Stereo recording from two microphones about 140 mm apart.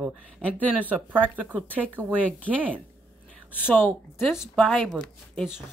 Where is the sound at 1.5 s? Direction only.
10° left (ahead or behind).